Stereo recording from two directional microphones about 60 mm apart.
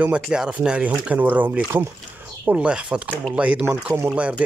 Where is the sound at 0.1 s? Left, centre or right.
Centre.